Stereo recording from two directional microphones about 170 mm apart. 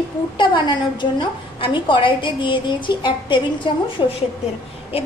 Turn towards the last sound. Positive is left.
turn(degrees=35)  # may be behind; listen again after turning